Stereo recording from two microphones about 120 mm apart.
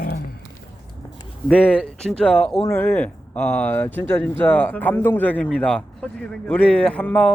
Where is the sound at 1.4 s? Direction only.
15° left (ahead or behind).